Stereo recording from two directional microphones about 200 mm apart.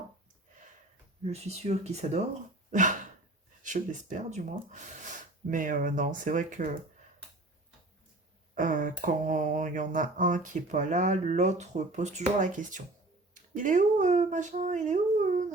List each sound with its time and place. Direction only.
1.2 s mantra: 30° right (ahead or behind)
8.5 s mantra: 40° right (ahead or behind)
13.3 s speech: 40° right (ahead or behind)